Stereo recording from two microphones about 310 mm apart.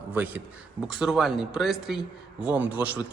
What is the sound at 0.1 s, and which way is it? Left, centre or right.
A man's voice, centre.